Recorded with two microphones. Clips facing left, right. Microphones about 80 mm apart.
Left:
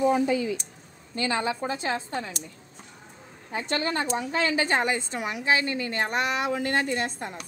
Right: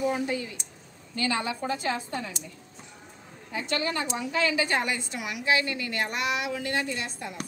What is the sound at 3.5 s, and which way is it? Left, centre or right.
A woman's voice, left.